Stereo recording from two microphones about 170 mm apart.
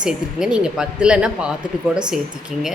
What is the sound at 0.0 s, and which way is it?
Speech, 5° right (ahead or behind).